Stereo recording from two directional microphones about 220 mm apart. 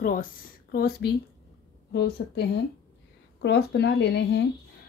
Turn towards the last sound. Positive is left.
turn(degrees=50)  # may be behind; listen again after turning